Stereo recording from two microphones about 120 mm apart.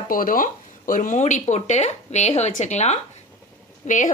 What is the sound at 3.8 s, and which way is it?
Speech, 90° left.